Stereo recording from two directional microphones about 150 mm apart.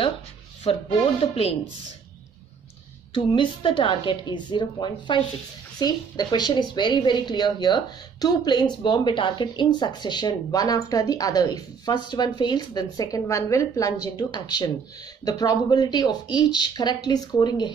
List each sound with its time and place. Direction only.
0.7 s a woman's voice: 40° left (ahead or behind)
3.2 s a woman's voice: 35° left (ahead or behind)